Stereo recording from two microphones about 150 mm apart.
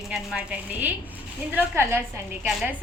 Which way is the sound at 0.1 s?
5° right (ahead or behind).